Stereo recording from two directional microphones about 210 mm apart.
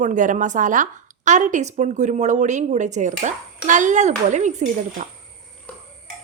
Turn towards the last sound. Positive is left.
turn(degrees=-35)  # may be behind; listen again after turning